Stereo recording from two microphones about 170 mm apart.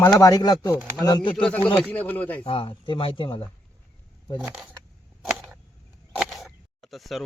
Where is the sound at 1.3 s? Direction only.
5° left (ahead or behind).